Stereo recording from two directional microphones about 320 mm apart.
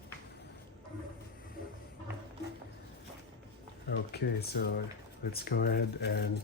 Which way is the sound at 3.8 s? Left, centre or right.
Left.